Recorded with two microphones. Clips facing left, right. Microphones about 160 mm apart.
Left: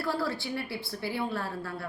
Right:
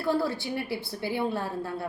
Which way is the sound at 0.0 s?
20° right (ahead or behind).